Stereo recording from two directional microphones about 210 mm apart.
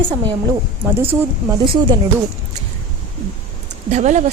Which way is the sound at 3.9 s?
35° right (ahead or behind).